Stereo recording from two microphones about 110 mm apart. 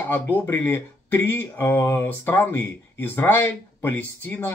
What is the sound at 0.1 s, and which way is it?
Speech, 20° left (ahead or behind).